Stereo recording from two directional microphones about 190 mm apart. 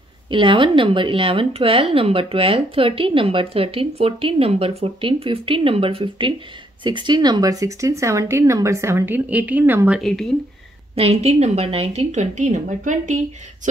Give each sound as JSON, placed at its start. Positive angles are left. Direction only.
{"t": 0.3, "sound": "speech", "side_deg": -25}
{"t": 11.0, "sound": "a woman's voice", "side_deg": -35}